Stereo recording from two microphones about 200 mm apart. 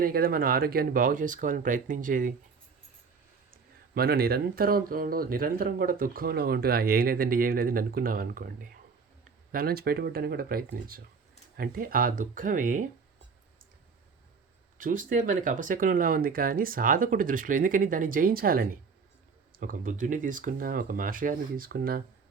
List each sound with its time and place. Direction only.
0.0 s speech: 50° right (ahead or behind)
3.5 s speech: 50° right (ahead or behind)
14.8 s speech: 40° right (ahead or behind)